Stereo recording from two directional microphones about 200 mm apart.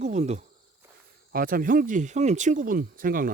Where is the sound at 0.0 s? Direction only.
35° right (ahead or behind).